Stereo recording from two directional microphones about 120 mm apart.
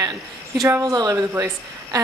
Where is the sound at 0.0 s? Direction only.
30° right (ahead or behind).